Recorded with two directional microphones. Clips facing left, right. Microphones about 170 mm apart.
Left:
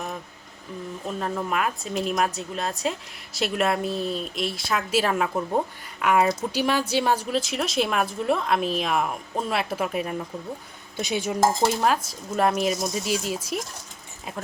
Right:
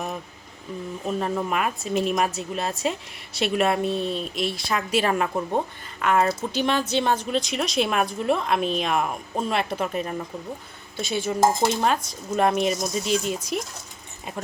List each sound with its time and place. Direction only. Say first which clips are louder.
1.0 s a woman's voice: right 3 dB; 5° right (ahead or behind)
10.9 s speech: even; 15° left (ahead or behind)
11.8 s a woman's voice: even; centre (ahead or behind)